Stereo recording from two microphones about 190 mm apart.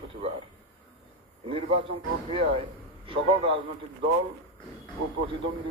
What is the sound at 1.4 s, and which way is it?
A man's voice, 30° right (ahead or behind).